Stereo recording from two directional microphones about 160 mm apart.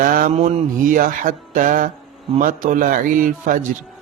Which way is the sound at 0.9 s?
60° right (ahead or behind).